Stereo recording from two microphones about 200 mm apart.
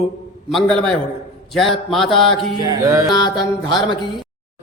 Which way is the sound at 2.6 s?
20° right (ahead or behind).